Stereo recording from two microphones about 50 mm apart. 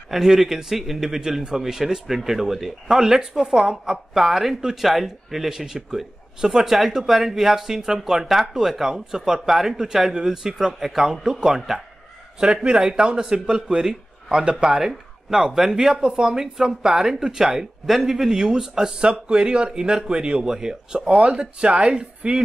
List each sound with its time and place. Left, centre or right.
0.1 s a man's voice: centre